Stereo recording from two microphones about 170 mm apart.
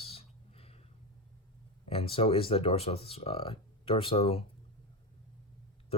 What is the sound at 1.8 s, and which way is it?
Speech, 35° left (ahead or behind).